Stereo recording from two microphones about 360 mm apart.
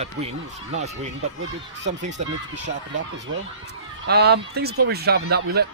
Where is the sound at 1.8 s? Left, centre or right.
Right.